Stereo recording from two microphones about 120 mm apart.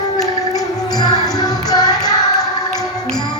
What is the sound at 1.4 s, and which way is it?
Music, 35° left (ahead or behind).